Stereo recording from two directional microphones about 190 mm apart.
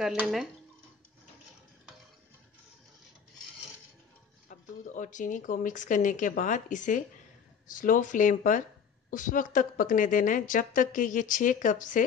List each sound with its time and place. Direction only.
0.0 s speech: centre (ahead or behind)
4.5 s a woman's voice: 40° left (ahead or behind)